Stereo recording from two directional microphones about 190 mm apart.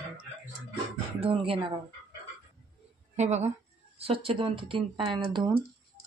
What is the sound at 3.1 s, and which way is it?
A woman's voice, 35° right (ahead or behind).